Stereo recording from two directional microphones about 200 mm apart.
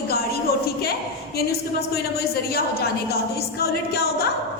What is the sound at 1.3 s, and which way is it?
Speech, 50° left (ahead or behind).